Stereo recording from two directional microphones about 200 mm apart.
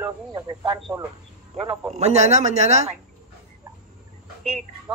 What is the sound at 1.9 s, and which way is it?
Speech, 35° right (ahead or behind).